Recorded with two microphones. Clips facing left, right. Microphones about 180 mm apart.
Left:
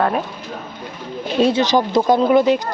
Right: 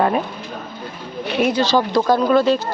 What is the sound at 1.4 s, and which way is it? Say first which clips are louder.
Speech: left 2 dB; 20° left (ahead or behind).